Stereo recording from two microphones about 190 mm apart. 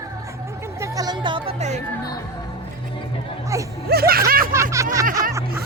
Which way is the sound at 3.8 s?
55° right (ahead or behind).